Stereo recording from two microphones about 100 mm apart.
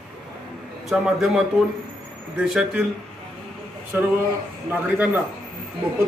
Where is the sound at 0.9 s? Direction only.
Centre (ahead or behind).